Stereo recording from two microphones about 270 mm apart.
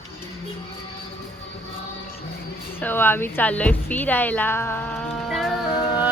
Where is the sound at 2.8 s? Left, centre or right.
Centre.